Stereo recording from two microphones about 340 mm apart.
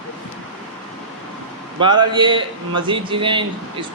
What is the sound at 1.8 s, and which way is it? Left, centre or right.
A man's voice, centre.